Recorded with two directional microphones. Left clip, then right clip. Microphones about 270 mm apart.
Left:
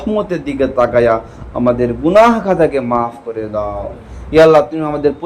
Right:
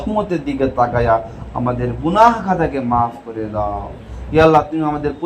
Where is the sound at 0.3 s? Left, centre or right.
Centre.